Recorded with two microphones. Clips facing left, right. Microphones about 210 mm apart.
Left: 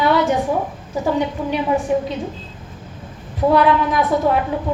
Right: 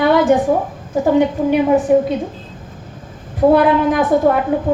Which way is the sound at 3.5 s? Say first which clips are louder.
Right 3 dB; 50° right (ahead or behind).